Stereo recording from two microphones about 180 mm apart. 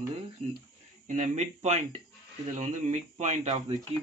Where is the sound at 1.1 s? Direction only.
40° right (ahead or behind).